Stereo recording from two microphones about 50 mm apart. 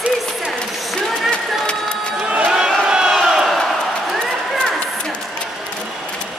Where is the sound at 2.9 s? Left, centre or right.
Centre.